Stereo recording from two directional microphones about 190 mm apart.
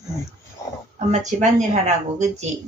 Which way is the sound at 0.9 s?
40° right (ahead or behind).